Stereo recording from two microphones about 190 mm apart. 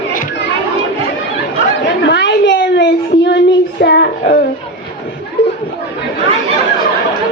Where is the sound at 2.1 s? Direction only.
65° left (ahead or behind).